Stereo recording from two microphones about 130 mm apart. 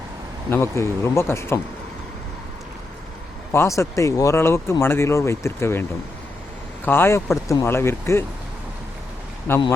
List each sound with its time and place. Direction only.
0.5 s speech: 20° left (ahead or behind)
3.5 s speech: 20° left (ahead or behind)
6.8 s speech: 15° left (ahead or behind)
9.5 s speech: 15° left (ahead or behind)